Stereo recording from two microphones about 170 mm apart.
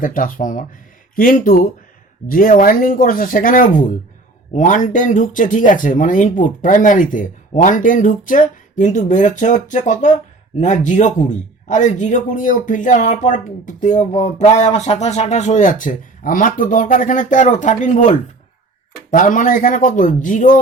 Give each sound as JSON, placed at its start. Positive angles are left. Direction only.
{"t": 0.0, "sound": "a man's voice", "side_deg": 55}